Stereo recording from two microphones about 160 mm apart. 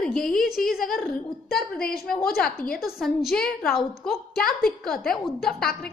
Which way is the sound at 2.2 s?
70° left (ahead or behind).